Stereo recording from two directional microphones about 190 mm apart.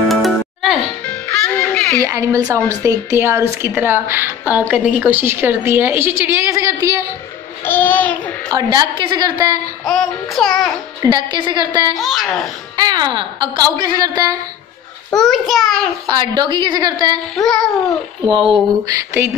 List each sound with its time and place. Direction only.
0.1 s music: centre (ahead or behind)
2.0 s a woman's voice: 15° right (ahead or behind)
7.6 s a child's voice: 10° left (ahead or behind)
8.5 s a woman's voice: 25° right (ahead or behind)
9.8 s child singing: centre (ahead or behind)
11.0 s a woman's voice: 20° right (ahead or behind)
12.0 s child singing: centre (ahead or behind)
12.7 s a woman's voice: 20° right (ahead or behind)
15.1 s child singing: centre (ahead or behind)
16.1 s a woman's voice: 20° right (ahead or behind)
17.4 s child singing: centre (ahead or behind)
18.3 s a woman's voice: 25° right (ahead or behind)